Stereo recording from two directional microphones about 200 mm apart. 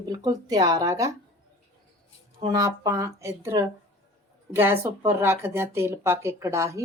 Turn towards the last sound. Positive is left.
turn(degrees=-15)  # may be behind; listen again after turning